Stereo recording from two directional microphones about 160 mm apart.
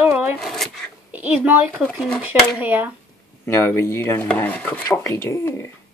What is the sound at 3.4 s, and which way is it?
Speech, 15° left (ahead or behind).